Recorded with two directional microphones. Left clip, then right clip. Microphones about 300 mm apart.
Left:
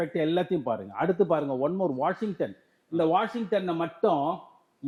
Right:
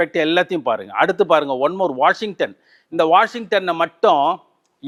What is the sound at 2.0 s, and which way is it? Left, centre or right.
Speech, centre.